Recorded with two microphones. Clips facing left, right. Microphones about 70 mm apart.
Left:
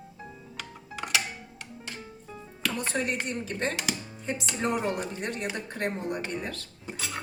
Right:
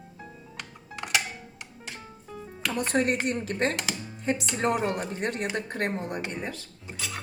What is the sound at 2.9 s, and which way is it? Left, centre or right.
Speech, right.